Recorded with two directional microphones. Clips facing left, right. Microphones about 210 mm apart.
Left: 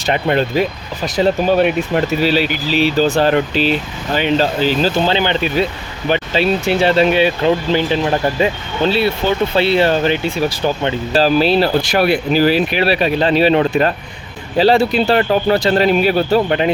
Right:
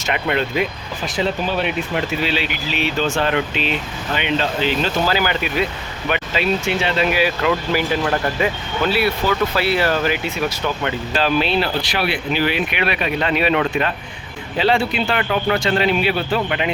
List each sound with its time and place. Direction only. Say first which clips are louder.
0.0 s speech: left 5 dB; 35° left (ahead or behind)